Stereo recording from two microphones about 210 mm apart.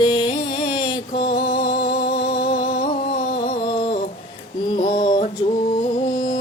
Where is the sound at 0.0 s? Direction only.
20° left (ahead or behind).